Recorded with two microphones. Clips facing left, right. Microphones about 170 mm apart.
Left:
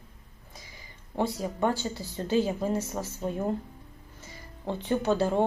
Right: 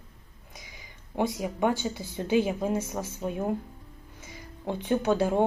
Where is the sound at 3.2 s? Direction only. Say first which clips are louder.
Even; 5° right (ahead or behind).